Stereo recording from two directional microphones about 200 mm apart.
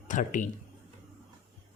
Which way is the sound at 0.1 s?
40° left (ahead or behind).